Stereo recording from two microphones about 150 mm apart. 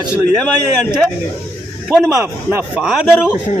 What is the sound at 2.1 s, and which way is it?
A man's voice, 15° right (ahead or behind).